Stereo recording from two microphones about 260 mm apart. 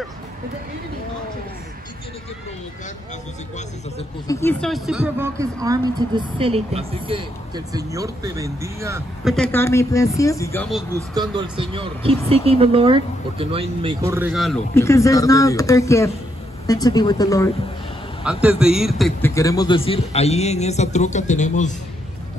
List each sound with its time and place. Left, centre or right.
4.3 s speech: centre
9.2 s a man's voice: centre
11.0 s speech: centre
14.7 s a man's voice: centre
18.2 s a man's voice: centre
19.3 s a man's voice: centre